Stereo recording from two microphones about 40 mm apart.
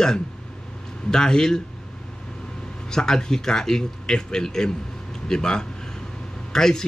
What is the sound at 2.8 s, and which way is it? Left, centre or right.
A man's voice, centre.